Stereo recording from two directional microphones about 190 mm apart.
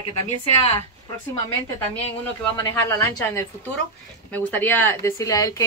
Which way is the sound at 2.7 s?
15° left (ahead or behind).